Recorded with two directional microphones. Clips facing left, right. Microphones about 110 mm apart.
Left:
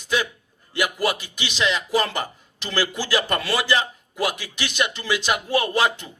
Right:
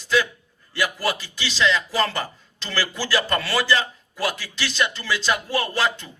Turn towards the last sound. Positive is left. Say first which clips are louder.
# left 2 dB
turn(degrees=20)  # may be behind; listen again after turning